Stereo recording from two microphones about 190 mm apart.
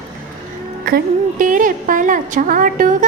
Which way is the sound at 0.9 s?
50° right (ahead or behind).